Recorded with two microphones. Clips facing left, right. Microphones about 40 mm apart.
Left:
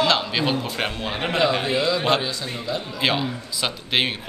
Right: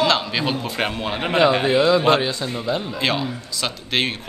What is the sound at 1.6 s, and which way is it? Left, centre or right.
Speech, right.